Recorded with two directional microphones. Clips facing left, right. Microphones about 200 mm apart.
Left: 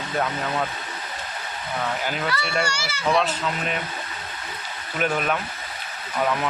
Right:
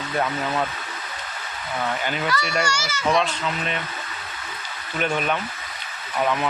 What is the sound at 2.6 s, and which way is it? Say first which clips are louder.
Speech: right 2 dB; 30° left (ahead or behind).